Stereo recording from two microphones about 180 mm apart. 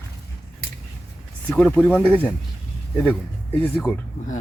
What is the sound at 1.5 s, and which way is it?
Speech, 10° left (ahead or behind).